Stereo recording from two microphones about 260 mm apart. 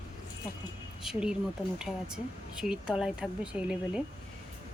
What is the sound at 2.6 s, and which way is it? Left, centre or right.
Speech, centre.